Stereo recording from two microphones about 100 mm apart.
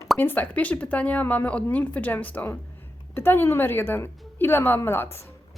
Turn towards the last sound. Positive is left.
turn(degrees=20)  # may be behind; listen again after turning